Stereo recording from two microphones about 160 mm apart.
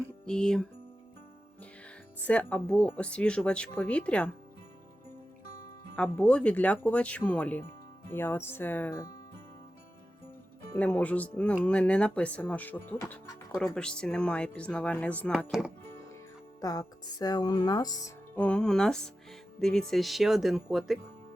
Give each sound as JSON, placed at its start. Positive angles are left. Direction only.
{"t": 0.3, "sound": "speech", "side_deg": 5}
{"t": 2.2, "sound": "speech", "side_deg": 10}
{"t": 6.0, "sound": "speech", "side_deg": 5}
{"t": 10.8, "sound": "speech", "side_deg": 10}
{"t": 13.7, "sound": "speech", "side_deg": 5}
{"t": 15.5, "sound": "speech", "side_deg": 0}
{"t": 16.6, "sound": "speech", "side_deg": 25}
{"t": 18.3, "sound": "speech", "side_deg": 5}
{"t": 19.5, "sound": "music", "side_deg": 5}
{"t": 19.9, "sound": "speech", "side_deg": 0}